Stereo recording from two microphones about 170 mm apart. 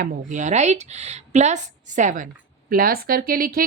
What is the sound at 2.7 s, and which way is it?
Speech, 60° right (ahead or behind).